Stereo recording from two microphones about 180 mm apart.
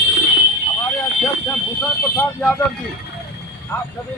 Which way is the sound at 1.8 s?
10° left (ahead or behind).